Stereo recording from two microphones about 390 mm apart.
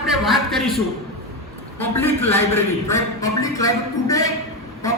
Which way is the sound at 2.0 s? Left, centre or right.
Centre.